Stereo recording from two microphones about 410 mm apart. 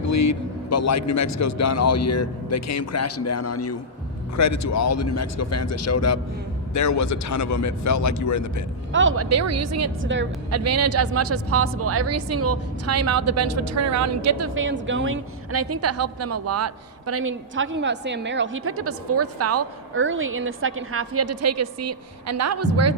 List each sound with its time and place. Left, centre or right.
0.0 s a man's voice: left
8.9 s a woman's voice: right